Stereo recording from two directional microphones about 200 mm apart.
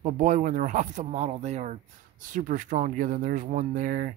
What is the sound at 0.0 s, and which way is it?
Speech, 40° right (ahead or behind).